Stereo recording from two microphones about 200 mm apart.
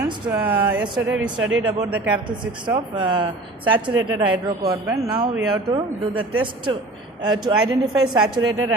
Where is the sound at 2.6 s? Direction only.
20° right (ahead or behind).